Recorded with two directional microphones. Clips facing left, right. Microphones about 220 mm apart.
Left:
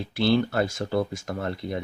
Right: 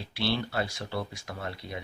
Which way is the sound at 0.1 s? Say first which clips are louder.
Left 8 dB; 50° left (ahead or behind).